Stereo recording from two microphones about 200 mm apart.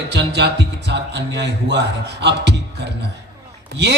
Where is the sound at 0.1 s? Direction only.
60° right (ahead or behind).